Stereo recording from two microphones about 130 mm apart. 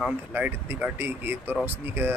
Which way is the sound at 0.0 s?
10° right (ahead or behind).